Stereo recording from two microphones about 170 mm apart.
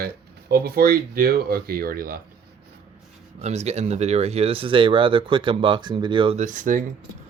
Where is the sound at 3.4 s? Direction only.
40° right (ahead or behind).